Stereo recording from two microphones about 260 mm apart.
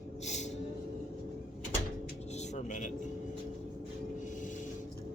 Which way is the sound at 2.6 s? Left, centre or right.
Left.